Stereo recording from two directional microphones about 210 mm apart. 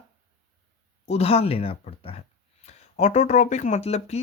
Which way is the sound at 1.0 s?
30° left (ahead or behind).